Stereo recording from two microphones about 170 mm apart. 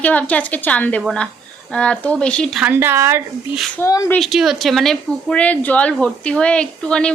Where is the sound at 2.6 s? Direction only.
10° right (ahead or behind).